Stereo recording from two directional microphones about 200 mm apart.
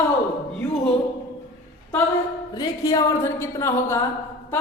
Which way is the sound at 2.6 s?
20° left (ahead or behind).